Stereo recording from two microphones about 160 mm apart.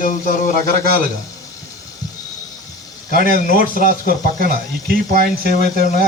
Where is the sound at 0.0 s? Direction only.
55° left (ahead or behind).